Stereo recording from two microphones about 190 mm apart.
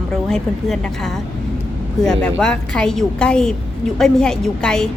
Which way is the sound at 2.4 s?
5° left (ahead or behind).